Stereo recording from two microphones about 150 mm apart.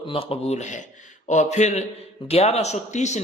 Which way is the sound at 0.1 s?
40° left (ahead or behind).